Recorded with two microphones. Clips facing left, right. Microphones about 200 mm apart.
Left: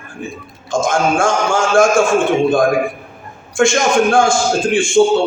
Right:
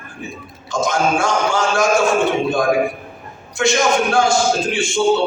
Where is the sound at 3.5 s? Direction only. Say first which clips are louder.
Left 3 dB; 50° left (ahead or behind).